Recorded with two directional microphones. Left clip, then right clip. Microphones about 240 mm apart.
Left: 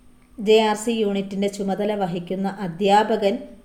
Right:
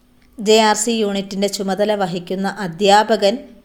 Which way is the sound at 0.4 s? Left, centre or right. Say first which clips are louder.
Right 4 dB; right.